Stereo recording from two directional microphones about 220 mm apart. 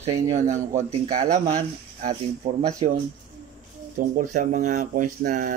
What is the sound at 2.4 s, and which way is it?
Speech, 35° right (ahead or behind).